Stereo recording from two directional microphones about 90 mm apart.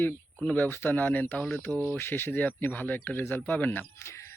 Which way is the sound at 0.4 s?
25° left (ahead or behind).